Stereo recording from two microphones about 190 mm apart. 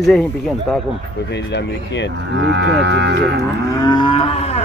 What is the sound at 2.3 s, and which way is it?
Speech, 65° right (ahead or behind).